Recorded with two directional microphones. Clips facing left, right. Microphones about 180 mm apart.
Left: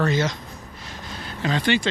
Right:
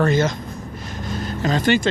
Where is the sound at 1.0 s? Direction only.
45° right (ahead or behind).